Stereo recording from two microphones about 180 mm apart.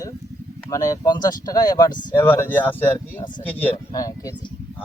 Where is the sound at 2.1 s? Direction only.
10° left (ahead or behind).